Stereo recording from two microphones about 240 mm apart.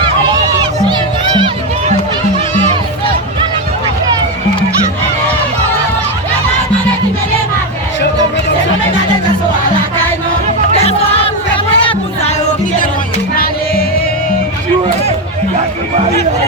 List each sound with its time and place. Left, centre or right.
11.5 s music: left
13.3 s music: left